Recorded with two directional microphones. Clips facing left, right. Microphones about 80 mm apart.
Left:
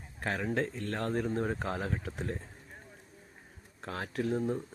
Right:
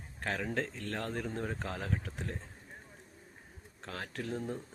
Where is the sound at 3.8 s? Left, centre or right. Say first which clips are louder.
Left 6 dB; centre.